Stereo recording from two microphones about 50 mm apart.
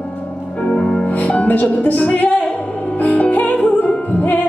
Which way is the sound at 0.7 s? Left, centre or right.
Left.